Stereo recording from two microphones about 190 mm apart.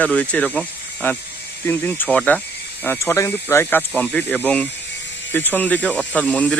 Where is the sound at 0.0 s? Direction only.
5° left (ahead or behind).